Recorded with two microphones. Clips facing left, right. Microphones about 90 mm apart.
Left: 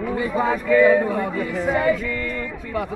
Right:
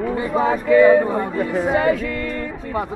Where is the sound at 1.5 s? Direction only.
55° right (ahead or behind).